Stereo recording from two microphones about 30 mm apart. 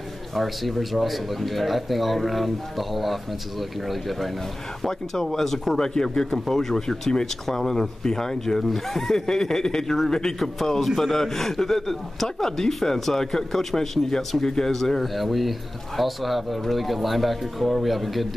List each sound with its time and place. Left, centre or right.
0.3 s a man's voice: centre
4.8 s speech: centre
8.6 s a man's voice: centre
10.6 s a man's voice: centre
13.7 s speech: centre
15.0 s a man's voice: centre